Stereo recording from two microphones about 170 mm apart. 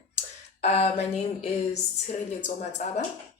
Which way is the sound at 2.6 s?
40° left (ahead or behind).